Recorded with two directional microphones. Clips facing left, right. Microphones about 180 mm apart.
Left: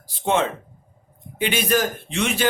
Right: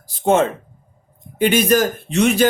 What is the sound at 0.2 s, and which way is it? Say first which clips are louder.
Speech: right 6 dB; 45° right (ahead or behind).